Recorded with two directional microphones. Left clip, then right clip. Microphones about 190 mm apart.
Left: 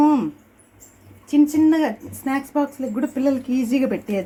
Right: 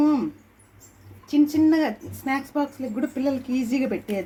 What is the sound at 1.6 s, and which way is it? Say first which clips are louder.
Speech: left 2 dB; 40° left (ahead or behind).